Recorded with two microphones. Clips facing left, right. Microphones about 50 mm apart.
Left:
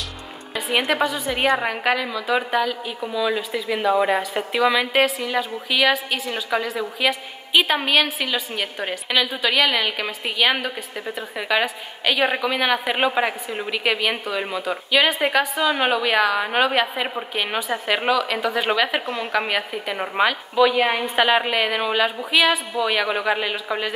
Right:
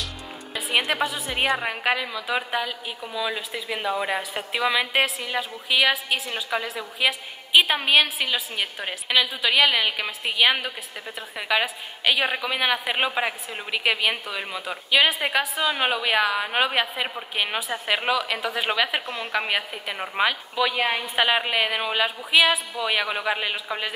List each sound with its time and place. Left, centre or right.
0.6 s a woman's voice: centre
11.1 s a woman's voice: centre